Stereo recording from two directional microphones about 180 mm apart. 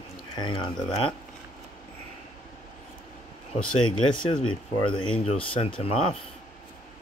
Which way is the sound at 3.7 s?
30° left (ahead or behind).